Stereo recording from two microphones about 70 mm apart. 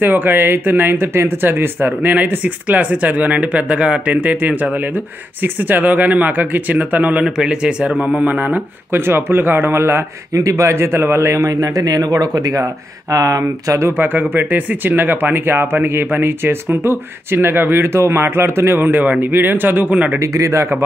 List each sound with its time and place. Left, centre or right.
0.0 s speech: right
2.1 s speech: right
7.2 s speech: centre; by 10.0 s right
10.3 s a man's voice: right
11.6 s speech: right
20.2 s a man's voice: right